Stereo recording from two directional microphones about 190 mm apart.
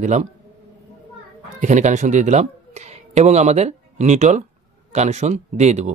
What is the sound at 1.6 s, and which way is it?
Speech, 40° right (ahead or behind).